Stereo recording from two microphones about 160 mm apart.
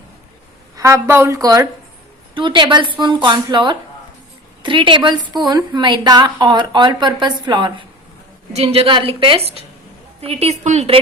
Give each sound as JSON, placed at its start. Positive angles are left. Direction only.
{"t": 0.8, "sound": "a woman's voice", "side_deg": -20}